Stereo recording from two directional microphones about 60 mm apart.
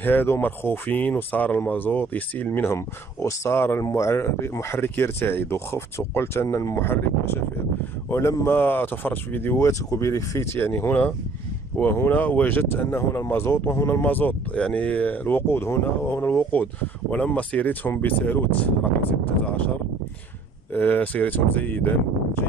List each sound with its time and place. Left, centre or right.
0.0 s speech: left
2.6 s speech: left
3.8 s speech: left
8.5 s speech: left
9.6 s speech: left
10.5 s speech: left
14.0 s speech: left
20.7 s speech: left